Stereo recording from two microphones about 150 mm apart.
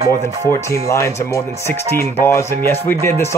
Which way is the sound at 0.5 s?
20° left (ahead or behind).